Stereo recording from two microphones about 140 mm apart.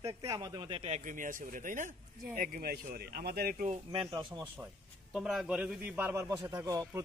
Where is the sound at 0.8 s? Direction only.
60° right (ahead or behind).